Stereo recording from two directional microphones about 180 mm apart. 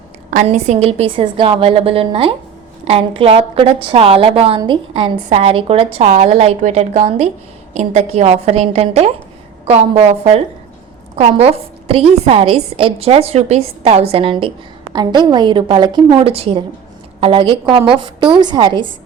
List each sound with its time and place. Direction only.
0.3 s a woman's voice: 40° right (ahead or behind); by 18.9 s 25° right (ahead or behind)